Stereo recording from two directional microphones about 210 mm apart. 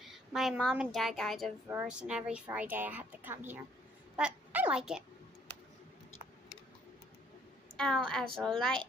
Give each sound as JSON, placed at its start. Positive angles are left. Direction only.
{"t": 0.0, "sound": "a woman's voice", "side_deg": 0}
{"t": 7.7, "sound": "a woman's voice", "side_deg": 5}